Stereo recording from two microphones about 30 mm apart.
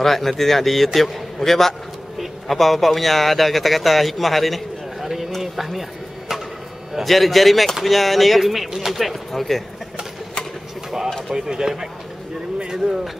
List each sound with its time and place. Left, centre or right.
0.0 s a man's voice: centre
5.4 s a sound: centre
7.0 s speech: centre
9.1 s speech: centre
11.4 s speech: centre